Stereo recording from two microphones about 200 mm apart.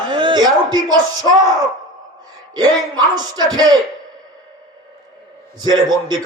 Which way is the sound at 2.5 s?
20° right (ahead or behind).